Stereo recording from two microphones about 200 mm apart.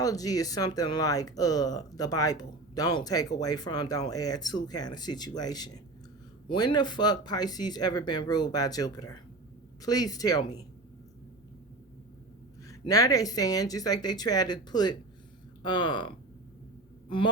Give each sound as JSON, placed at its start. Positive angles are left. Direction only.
{"t": 0.0, "sound": "speech", "side_deg": 15}
{"t": 12.6, "sound": "speech", "side_deg": 15}